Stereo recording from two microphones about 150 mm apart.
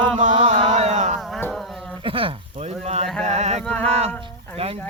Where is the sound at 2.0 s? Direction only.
35° right (ahead or behind).